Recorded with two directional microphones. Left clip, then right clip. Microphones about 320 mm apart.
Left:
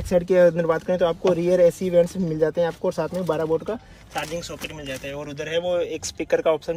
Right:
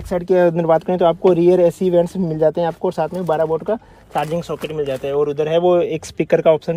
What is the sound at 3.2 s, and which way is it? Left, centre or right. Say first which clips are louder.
Speech: right 5 dB; right.